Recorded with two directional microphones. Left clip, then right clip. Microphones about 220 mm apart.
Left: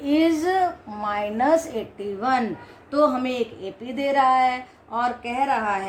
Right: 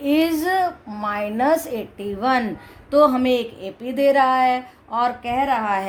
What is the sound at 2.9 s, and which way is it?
A woman's voice, 45° right (ahead or behind).